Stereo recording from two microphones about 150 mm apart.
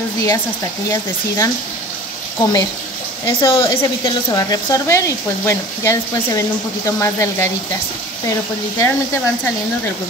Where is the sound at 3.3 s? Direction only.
35° left (ahead or behind).